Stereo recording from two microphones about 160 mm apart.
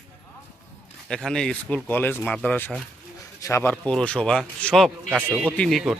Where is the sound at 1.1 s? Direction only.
5° left (ahead or behind).